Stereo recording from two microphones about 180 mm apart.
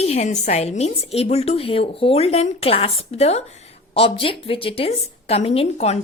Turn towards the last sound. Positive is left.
turn(degrees=35)  # may be behind; listen again after turning